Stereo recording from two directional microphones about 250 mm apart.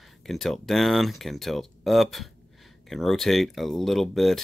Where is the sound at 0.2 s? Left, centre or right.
Centre.